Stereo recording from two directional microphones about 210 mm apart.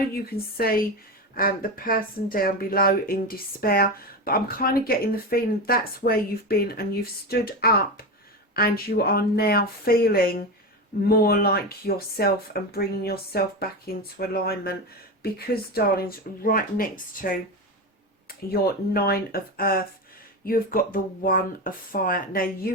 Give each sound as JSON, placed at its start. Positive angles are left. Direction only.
{"t": 0.1, "sound": "speech", "side_deg": 45}
{"t": 18.5, "sound": "speech", "side_deg": 45}